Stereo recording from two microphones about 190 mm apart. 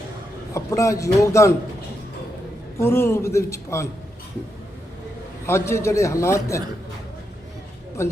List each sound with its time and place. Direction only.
0.5 s a man's voice: 15° left (ahead or behind)
2.7 s a man's voice: 15° left (ahead or behind)
5.5 s a man's voice: 15° left (ahead or behind)